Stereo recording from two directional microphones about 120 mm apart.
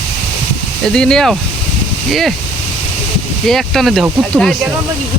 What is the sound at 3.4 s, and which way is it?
Speech, centre (ahead or behind).